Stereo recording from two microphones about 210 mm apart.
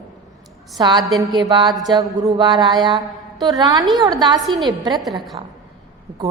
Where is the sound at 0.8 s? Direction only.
20° right (ahead or behind).